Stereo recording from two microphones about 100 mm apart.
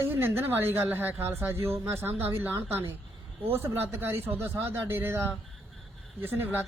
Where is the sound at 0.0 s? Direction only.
20° right (ahead or behind).